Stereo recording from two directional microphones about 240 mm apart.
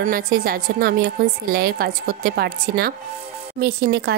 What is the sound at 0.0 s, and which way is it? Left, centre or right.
A woman's voice, right.